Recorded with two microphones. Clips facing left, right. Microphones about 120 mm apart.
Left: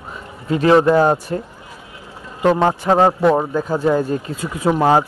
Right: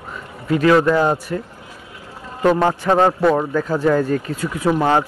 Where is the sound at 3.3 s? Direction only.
20° left (ahead or behind).